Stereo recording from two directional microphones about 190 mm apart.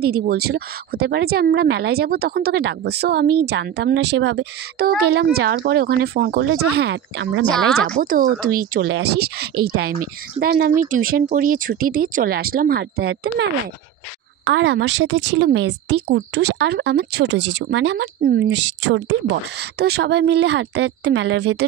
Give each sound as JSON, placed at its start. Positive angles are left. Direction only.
{"t": 0.0, "sound": "a woman's voice", "side_deg": -55}
{"t": 7.5, "sound": "a woman's voice", "side_deg": 0}
{"t": 8.0, "sound": "a woman's voice", "side_deg": -50}
{"t": 14.4, "sound": "a woman's voice", "side_deg": -70}
{"t": 19.8, "sound": "a woman's voice", "side_deg": -60}